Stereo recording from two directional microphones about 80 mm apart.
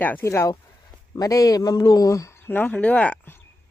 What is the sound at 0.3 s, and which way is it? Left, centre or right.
Speech, left.